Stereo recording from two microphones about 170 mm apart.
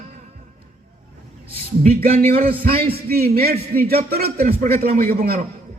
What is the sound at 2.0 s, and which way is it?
Speech, 60° right (ahead or behind).